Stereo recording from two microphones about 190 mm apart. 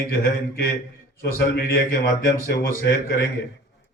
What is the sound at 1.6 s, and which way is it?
A man's voice, 50° left (ahead or behind).